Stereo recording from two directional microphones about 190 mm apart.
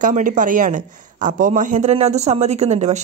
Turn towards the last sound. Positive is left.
turn(degrees=-35)  # may be behind; listen again after turning